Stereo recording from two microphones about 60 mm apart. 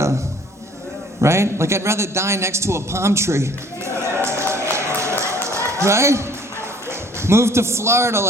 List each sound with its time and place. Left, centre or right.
1.2 s a man's voice: right
4.0 s run: right
7.2 s a man's voice: right